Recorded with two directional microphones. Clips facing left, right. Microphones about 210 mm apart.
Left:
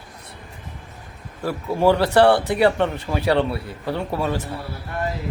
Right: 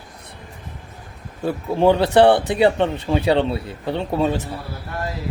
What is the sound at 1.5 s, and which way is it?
Speech, 20° right (ahead or behind).